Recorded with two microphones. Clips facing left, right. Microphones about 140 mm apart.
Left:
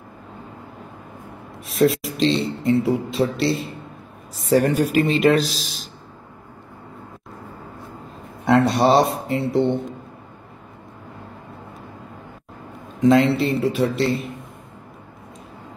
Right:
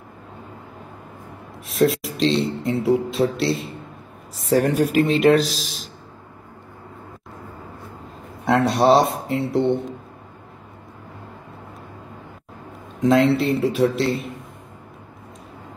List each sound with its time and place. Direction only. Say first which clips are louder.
1.7 s speech: left 1 dB; centre (ahead or behind)
4.6 s speech: left 1 dB; 50° right (ahead or behind)
4.9 s speech: right 2 dB; centre (ahead or behind)
8.5 s speech: even; centre (ahead or behind)
13.0 s speech: left 1 dB; centre (ahead or behind)